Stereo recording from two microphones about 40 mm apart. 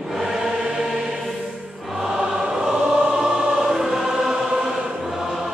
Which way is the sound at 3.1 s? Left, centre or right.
Centre.